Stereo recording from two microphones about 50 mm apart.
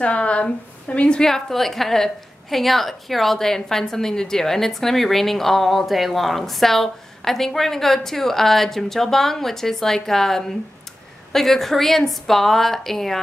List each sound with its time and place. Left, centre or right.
0.0 s a woman's voice: left; by 13.2 s centre